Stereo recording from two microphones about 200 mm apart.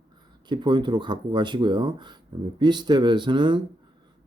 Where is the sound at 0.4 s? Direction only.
20° right (ahead or behind).